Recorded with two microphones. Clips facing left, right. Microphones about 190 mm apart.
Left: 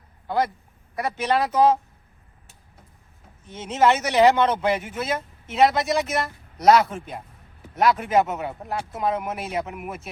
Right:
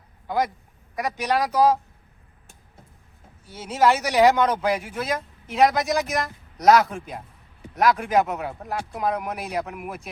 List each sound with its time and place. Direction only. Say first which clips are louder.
0.3 s speech: left 1 dB; 15° right (ahead or behind)
1.5 s speech: even; 10° right (ahead or behind)
3.5 s speech: even; 10° right (ahead or behind)
4.6 s speech: left 1 dB; centre (ahead or behind)